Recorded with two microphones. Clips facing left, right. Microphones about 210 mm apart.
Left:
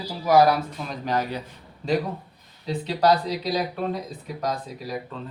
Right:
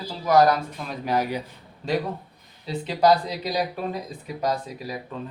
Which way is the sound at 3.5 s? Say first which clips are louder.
Left 1 dB; 10° right (ahead or behind).